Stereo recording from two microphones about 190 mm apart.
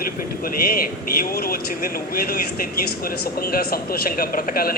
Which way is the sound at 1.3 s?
50° left (ahead or behind).